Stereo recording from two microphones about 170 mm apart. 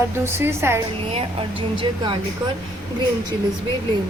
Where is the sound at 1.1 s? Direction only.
30° right (ahead or behind).